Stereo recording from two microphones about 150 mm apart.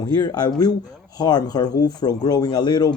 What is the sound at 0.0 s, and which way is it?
Speech, 25° left (ahead or behind).